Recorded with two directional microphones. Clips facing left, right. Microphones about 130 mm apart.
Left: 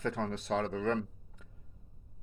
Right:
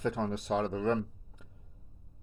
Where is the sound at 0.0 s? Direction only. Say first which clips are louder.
Right 2 dB; 15° right (ahead or behind).